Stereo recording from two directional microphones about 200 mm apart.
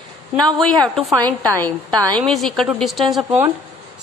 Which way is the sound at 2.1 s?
Centre (ahead or behind).